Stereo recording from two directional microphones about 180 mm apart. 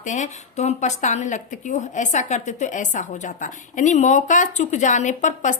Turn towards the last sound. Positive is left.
turn(degrees=45)  # may be behind; listen again after turning